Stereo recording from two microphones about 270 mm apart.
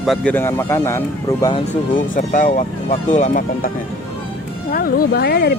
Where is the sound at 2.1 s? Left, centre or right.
Left.